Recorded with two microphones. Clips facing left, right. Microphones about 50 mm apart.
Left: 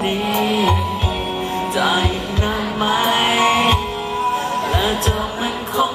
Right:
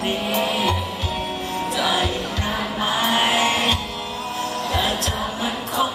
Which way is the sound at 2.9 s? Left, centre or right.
Left.